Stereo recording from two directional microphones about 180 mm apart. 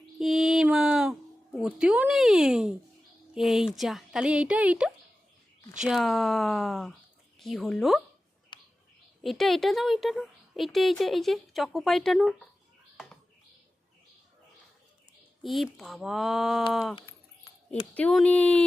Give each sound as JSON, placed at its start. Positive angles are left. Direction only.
{"t": 0.2, "sound": "mantra", "side_deg": 0}
{"t": 1.5, "sound": "speech", "side_deg": -5}
{"t": 8.5, "sound": "a sound", "side_deg": 25}
{"t": 9.2, "sound": "speech", "side_deg": 0}
{"t": 15.4, "sound": "speech", "side_deg": 0}
{"t": 17.9, "sound": "speech", "side_deg": 5}